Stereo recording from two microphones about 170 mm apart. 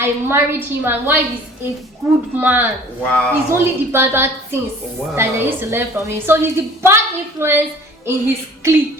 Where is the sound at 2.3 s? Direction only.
10° right (ahead or behind).